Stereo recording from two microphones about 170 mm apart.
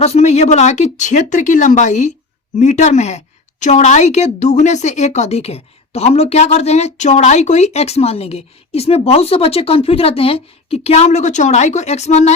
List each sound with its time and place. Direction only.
0.0 s a woman's voice: 40° left (ahead or behind)